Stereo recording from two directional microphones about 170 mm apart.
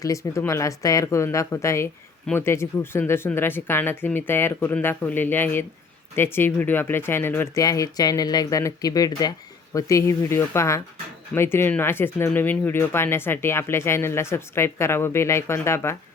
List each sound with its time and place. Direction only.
0.0 s speech: 20° left (ahead or behind)